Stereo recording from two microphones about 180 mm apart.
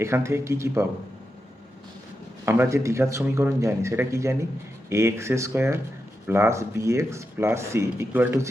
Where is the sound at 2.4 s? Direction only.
15° right (ahead or behind).